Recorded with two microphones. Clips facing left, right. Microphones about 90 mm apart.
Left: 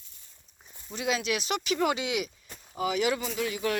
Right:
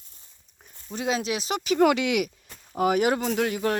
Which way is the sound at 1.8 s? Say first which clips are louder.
Right 10 dB; 60° right (ahead or behind).